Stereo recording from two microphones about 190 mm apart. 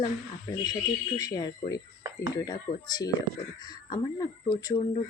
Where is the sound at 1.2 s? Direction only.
20° left (ahead or behind).